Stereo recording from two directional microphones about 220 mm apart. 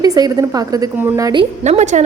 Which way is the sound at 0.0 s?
15° right (ahead or behind).